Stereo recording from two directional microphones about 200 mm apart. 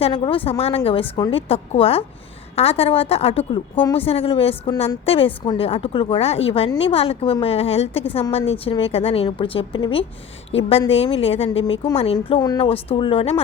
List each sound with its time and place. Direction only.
0.0 s a woman's voice: 25° left (ahead or behind)